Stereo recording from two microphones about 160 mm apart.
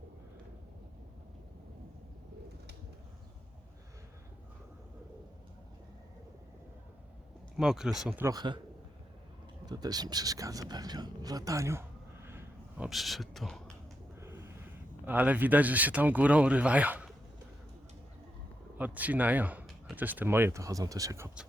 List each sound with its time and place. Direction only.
7.5 s speech: 5° right (ahead or behind)
8.2 s speech: 25° right (ahead or behind)
9.6 s speech: 25° right (ahead or behind); by 13.6 s centre (ahead or behind)
14.2 s gasp: 15° right (ahead or behind)
15.0 s speech: 10° right (ahead or behind)
18.8 s speech: 10° right (ahead or behind)